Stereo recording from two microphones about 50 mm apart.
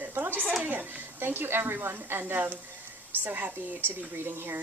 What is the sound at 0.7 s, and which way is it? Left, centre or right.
Speech, right.